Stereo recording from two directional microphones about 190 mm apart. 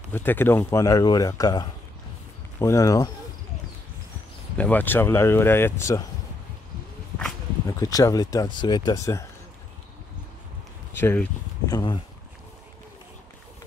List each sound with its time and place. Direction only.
0.1 s speech: 10° left (ahead or behind)
4.6 s speech: 10° left (ahead or behind)
7.6 s speech: 20° left (ahead or behind)
11.0 s speech: 10° left (ahead or behind)
11.7 s speech: 25° left (ahead or behind)